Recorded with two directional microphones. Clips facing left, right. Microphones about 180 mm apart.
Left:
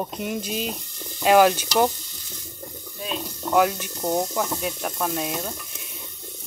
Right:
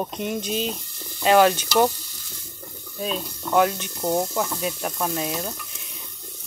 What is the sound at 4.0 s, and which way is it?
Speech, 5° right (ahead or behind).